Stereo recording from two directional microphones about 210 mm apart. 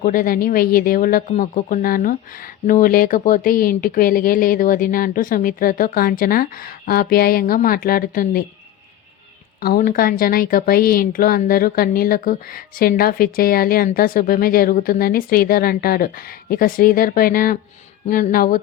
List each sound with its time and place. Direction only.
0.0 s a woman's voice: 40° left (ahead or behind)
9.6 s a woman's voice: 45° left (ahead or behind)